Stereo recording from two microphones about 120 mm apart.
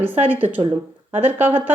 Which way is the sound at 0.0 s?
15° right (ahead or behind).